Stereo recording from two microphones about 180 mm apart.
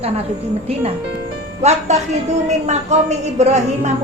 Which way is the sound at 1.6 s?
40° right (ahead or behind).